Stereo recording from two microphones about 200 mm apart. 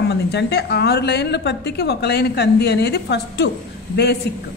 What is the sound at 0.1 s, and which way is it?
A woman's voice, 55° left (ahead or behind).